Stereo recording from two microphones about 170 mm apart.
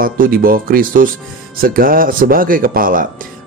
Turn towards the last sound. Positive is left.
turn(degrees=-55)  # may be behind; listen again after turning